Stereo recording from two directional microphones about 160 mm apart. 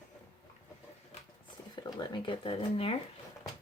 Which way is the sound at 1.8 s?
25° left (ahead or behind).